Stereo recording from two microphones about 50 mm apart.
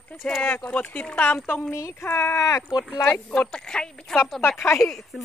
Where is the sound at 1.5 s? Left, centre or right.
Left.